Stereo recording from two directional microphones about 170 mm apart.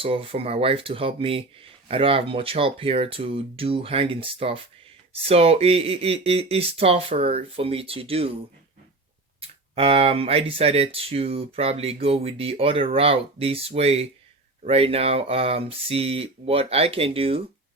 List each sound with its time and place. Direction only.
0.0 s speech: 35° right (ahead or behind)
9.4 s speech: 35° right (ahead or behind)